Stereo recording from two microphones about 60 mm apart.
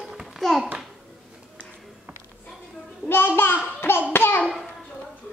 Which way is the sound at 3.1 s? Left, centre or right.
Left.